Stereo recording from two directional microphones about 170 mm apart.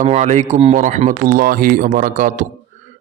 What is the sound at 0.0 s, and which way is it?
A man's voice, 45° right (ahead or behind).